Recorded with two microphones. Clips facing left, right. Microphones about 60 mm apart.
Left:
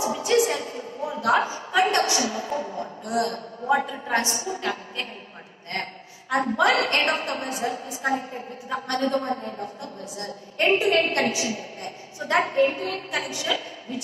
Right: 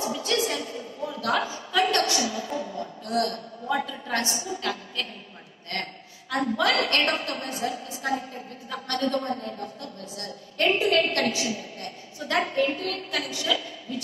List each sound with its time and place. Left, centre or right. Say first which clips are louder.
0.0 s a sound: left 5 dB; left
2.1 s a woman's voice: left 2 dB; left
6.3 s a woman's voice: left 3 dB; left